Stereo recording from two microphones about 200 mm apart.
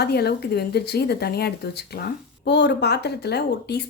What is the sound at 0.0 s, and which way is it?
Speech, 55° left (ahead or behind).